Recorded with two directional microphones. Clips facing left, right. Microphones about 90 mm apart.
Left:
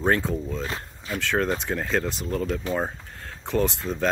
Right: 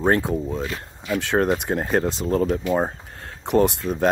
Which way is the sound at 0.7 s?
35° left (ahead or behind).